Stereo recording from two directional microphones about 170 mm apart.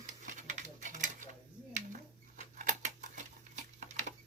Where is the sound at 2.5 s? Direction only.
45° right (ahead or behind).